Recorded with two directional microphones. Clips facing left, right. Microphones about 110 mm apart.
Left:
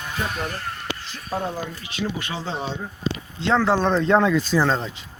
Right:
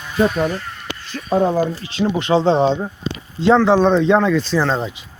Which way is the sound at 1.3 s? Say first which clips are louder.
Right 11 dB; 60° right (ahead or behind).